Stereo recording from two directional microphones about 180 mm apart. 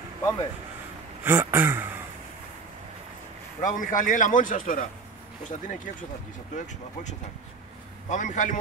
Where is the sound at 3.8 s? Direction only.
45° left (ahead or behind).